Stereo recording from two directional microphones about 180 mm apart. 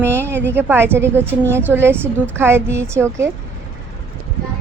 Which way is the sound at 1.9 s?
10° left (ahead or behind).